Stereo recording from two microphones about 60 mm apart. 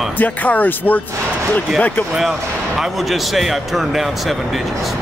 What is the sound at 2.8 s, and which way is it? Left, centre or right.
Speech, centre.